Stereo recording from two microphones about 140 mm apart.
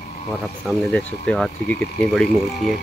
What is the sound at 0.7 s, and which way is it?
Speech, 5° left (ahead or behind).